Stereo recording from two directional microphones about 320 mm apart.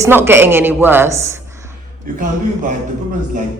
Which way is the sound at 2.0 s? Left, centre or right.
Right.